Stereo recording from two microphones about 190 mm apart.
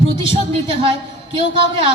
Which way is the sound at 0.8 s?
25° right (ahead or behind).